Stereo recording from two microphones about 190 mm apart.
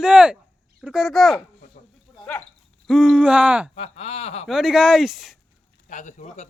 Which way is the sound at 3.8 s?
30° left (ahead or behind).